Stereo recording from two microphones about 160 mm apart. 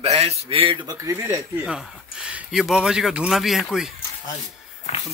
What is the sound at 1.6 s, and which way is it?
Speech, 5° right (ahead or behind).